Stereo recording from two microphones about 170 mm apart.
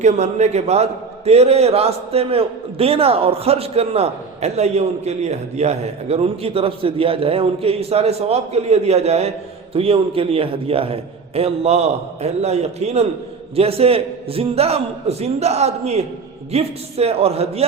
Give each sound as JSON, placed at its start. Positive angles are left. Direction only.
{"t": 0.0, "sound": "a man's voice", "side_deg": -40}